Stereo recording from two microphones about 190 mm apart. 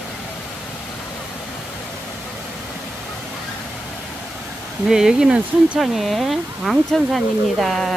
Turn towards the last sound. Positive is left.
turn(degrees=0)  # may be behind; listen again after turning